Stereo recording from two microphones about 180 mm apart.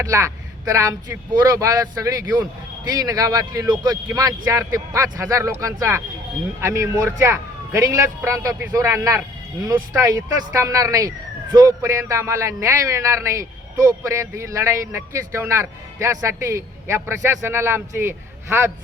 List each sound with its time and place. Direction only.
0.0 s speech: 15° right (ahead or behind)